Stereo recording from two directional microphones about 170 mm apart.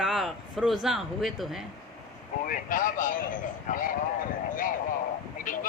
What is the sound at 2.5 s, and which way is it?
Speech, 50° left (ahead or behind).